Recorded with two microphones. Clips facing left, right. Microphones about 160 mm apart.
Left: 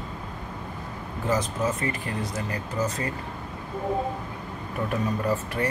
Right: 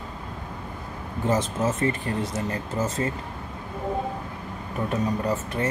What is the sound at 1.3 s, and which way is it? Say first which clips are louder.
Speech: right 2 dB; 25° right (ahead or behind).